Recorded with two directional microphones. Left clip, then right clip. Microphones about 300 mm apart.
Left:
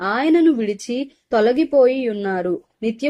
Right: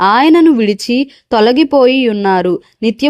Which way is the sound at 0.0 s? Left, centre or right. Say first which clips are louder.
Right 9 dB; right.